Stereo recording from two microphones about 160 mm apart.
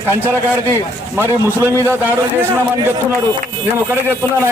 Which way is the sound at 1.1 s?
15° right (ahead or behind).